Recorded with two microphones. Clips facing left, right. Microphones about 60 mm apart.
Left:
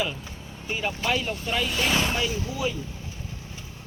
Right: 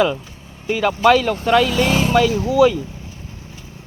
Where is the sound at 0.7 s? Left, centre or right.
Right.